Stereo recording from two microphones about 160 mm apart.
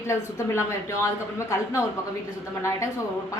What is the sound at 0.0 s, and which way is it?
A woman's voice, 15° left (ahead or behind).